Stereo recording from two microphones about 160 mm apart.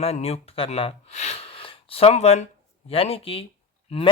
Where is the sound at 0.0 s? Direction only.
40° left (ahead or behind).